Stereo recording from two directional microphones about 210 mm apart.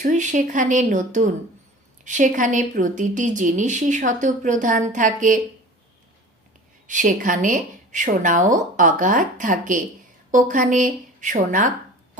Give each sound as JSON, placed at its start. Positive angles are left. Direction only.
{"t": 0.0, "sound": "speech", "side_deg": -35}
{"t": 6.8, "sound": "speech", "side_deg": -35}